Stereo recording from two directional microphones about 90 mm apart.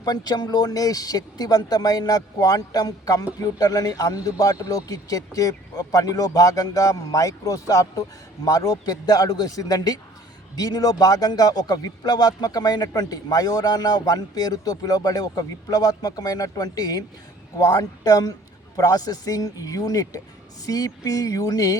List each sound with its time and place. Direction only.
0.0 s a man's voice: 45° left (ahead or behind)